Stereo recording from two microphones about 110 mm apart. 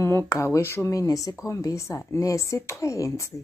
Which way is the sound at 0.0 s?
25° left (ahead or behind).